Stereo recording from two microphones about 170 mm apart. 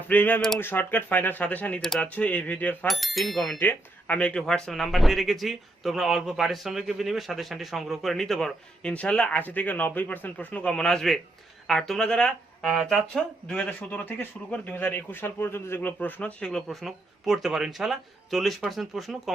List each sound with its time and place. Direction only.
0.1 s a man's voice: 10° left (ahead or behind)